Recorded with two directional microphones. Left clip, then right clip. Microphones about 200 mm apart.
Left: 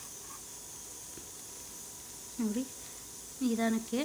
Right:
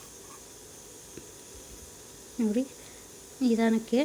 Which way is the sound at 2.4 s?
10° right (ahead or behind).